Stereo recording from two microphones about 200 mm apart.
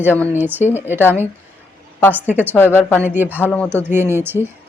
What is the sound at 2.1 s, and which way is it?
Speech, 10° right (ahead or behind).